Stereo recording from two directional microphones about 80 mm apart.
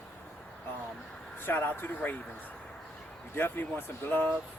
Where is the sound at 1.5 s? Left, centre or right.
Left.